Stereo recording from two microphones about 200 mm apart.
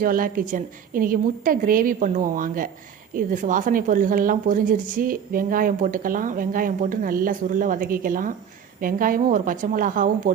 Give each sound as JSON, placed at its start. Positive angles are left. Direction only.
{"t": 0.0, "sound": "a woman's voice", "side_deg": -45}